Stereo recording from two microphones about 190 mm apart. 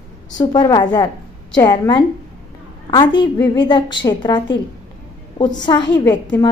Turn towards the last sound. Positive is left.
turn(degrees=20)  # may be behind; listen again after turning